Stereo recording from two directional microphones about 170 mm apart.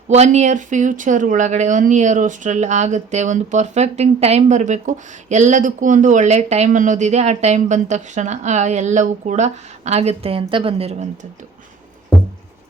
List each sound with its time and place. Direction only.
0.1 s speech: 40° right (ahead or behind)